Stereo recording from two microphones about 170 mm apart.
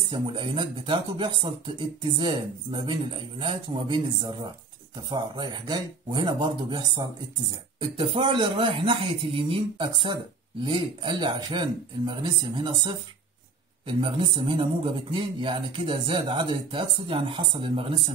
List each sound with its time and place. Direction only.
0.1 s speech: 30° right (ahead or behind)
8.0 s a man's voice: 30° right (ahead or behind)